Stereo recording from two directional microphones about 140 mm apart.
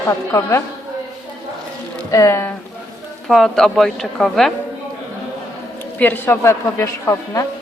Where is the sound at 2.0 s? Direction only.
20° left (ahead or behind).